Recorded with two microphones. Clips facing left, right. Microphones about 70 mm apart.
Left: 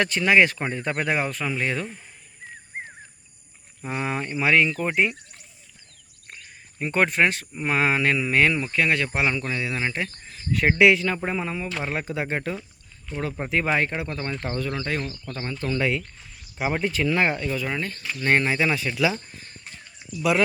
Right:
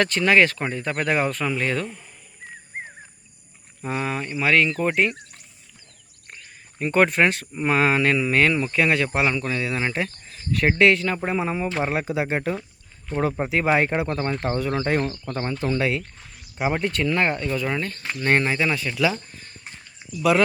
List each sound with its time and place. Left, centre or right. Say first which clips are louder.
0.0 s speech: right 1 dB; centre; by 1.0 s left
1.0 s speech: right 5 dB; centre
3.8 s speech: right 3 dB; centre
4.0 s speech: left 1 dB; left
4.7 s speech: right 2 dB; centre
6.7 s speech: right 3 dB; centre
11.3 s speech: right 5 dB; centre
11.9 s speech: right 3 dB; centre; by 14.9 s right
14.9 s speech: right 6 dB; right
15.2 s speech: right 4 dB; right
15.8 s speech: right 1 dB; centre
17.5 s speech: right 2 dB; centre
18.5 s speech: even; centre
20.1 s speech: right 3 dB; centre